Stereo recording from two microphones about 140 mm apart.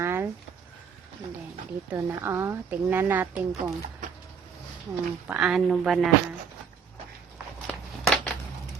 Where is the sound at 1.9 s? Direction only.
15° right (ahead or behind).